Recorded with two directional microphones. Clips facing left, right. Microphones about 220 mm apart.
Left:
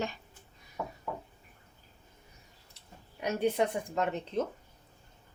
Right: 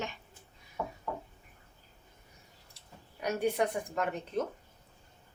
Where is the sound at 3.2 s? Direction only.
25° left (ahead or behind).